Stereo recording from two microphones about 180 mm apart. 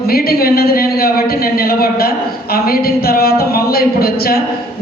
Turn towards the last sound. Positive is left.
turn(degrees=60)  # may be behind; listen again after turning